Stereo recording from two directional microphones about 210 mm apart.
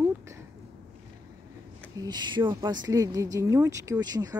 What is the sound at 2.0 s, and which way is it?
Speech, 20° right (ahead or behind).